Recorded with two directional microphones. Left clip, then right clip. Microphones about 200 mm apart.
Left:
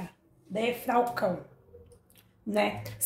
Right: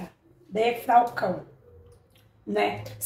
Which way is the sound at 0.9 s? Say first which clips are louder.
Right 7 dB; 50° left (ahead or behind).